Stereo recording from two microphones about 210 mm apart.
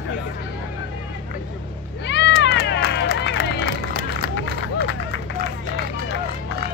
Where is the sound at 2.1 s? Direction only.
55° left (ahead or behind).